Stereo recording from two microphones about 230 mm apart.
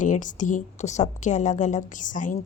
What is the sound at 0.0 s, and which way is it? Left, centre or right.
A woman's voice, left.